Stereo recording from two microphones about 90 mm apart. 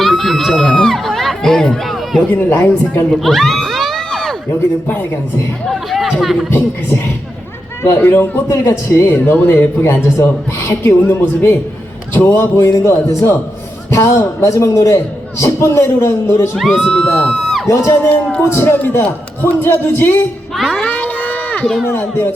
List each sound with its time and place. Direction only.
0.0 s crowd: centre (ahead or behind)
2.2 s speech: 20° left (ahead or behind)
3.1 s a sound: centre (ahead or behind)
5.6 s speech: centre (ahead or behind)
6.5 s speech: 20° left (ahead or behind)
8.4 s a man's voice: 35° left (ahead or behind)
9.1 s a man's voice: 20° left (ahead or behind)
16.6 s speech: centre (ahead or behind)
17.7 s speech: 30° left (ahead or behind)
18.1 s speech: 15° left (ahead or behind)
20.6 s speech: 5° right (ahead or behind)
20.8 s run: 20° left (ahead or behind)
21.8 s speech: 20° left (ahead or behind)